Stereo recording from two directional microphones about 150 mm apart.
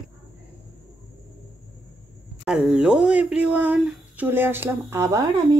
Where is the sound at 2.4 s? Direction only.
5° right (ahead or behind).